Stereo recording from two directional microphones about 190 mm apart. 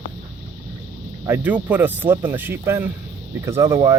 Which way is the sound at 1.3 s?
10° right (ahead or behind).